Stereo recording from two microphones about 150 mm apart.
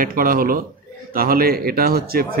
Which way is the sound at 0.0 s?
70° right (ahead or behind).